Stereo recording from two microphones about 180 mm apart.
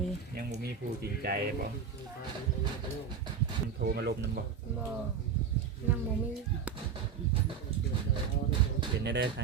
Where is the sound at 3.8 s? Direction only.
60° right (ahead or behind).